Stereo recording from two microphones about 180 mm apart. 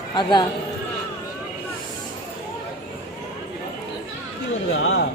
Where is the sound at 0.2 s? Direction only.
25° left (ahead or behind).